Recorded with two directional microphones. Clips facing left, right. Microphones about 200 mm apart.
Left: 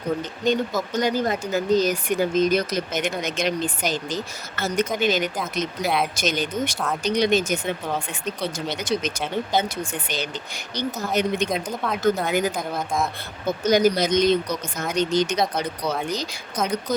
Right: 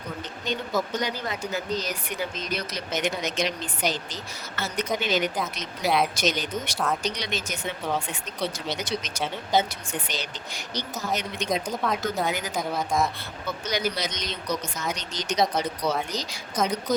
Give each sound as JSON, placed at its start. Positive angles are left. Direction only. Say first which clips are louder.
{"t": 0.4, "sound": "speech", "louder": "left 5 dB", "side_deg": 50}
{"t": 5.8, "sound": "speech", "louder": "right 1 dB", "side_deg": 0}
{"t": 6.1, "sound": "speech", "louder": "left 3 dB", "side_deg": 50}
{"t": 7.9, "sound": "speech", "louder": "left 2 dB", "side_deg": 0}
{"t": 8.5, "sound": "speech", "louder": "left 4 dB", "side_deg": 50}
{"t": 10.8, "sound": "speech", "louder": "left 6 dB", "side_deg": 55}
{"t": 11.4, "sound": "speech", "louder": "left 1 dB", "side_deg": 0}
{"t": 12.3, "sound": "speech", "louder": "left 8 dB", "side_deg": 55}
{"t": 12.5, "sound": "speech", "louder": "even", "side_deg": 0}
{"t": 13.7, "sound": "speech", "louder": "left 11 dB", "side_deg": 45}
{"t": 15.4, "sound": "speech", "louder": "even", "side_deg": 0}